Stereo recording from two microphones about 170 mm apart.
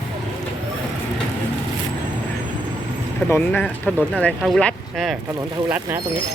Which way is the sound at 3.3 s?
10° left (ahead or behind).